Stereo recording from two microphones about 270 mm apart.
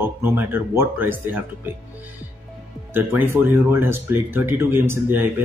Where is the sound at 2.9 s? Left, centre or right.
Centre.